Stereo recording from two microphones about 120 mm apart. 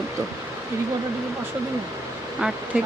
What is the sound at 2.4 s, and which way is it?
Speech, 5° right (ahead or behind).